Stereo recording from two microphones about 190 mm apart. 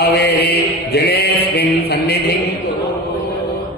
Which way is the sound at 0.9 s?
60° left (ahead or behind).